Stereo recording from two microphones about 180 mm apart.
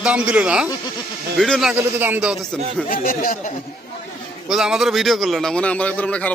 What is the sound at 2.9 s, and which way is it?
Speech, 50° left (ahead or behind).